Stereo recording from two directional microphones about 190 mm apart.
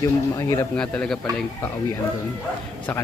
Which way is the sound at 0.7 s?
5° left (ahead or behind).